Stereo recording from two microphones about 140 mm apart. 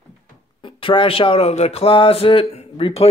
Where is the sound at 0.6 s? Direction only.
35° left (ahead or behind).